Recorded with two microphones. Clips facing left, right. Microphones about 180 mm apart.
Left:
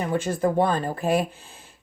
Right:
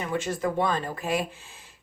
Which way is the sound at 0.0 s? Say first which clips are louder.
Left 4 dB; 40° left (ahead or behind).